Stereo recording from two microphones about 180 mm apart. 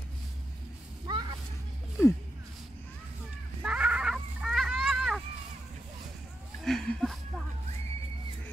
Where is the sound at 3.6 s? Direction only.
5° right (ahead or behind).